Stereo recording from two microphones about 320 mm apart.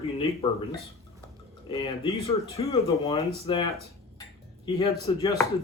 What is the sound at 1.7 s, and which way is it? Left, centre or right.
Speech, centre.